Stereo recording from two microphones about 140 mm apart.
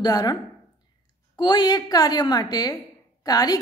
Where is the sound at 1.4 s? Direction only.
35° left (ahead or behind).